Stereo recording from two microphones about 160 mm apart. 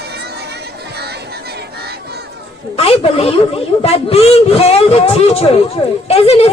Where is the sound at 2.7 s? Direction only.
40° left (ahead or behind).